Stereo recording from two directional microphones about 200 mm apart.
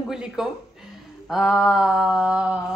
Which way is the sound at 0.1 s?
Centre (ahead or behind).